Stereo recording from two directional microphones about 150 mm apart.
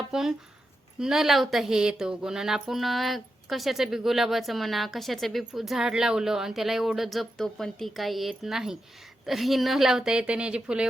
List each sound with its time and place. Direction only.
0.1 s a woman's voice: 5° right (ahead or behind)